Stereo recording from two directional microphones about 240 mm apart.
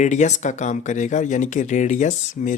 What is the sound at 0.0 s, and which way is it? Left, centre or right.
Speech, left.